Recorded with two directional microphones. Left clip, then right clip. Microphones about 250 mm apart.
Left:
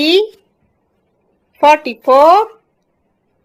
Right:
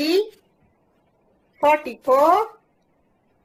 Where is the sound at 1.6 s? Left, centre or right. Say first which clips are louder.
Left 8 dB; left.